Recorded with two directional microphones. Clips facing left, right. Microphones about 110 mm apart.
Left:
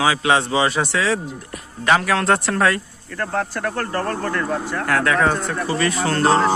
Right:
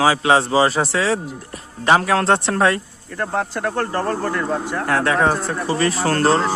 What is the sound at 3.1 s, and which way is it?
Speech, 20° right (ahead or behind).